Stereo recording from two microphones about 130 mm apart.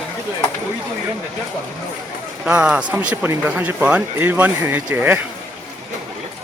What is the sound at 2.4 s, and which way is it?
Speech, 5° right (ahead or behind).